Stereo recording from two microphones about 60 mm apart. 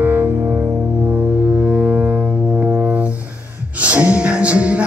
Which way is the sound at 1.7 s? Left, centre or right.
Right.